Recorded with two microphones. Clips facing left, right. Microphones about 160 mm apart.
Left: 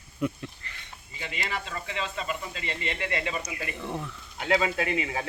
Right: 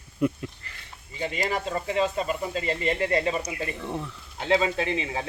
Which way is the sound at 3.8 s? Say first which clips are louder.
Right 2 dB; centre (ahead or behind).